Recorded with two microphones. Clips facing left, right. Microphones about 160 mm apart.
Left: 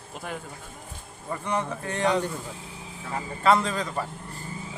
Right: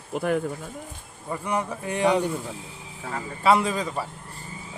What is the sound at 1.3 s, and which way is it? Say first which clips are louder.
Speech: right 1 dB; 10° right (ahead or behind).